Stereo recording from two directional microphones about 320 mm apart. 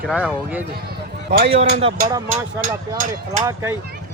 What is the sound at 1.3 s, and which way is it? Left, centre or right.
Speech, right.